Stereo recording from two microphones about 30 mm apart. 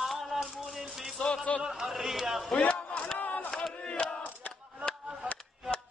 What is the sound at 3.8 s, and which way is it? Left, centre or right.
Battle cry, left.